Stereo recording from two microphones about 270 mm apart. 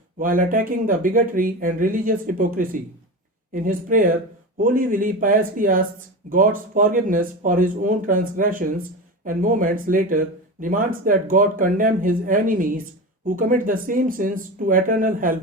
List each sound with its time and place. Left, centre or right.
0.2 s speech: right